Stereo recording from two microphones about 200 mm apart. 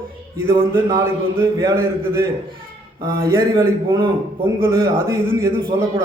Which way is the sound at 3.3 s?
15° right (ahead or behind).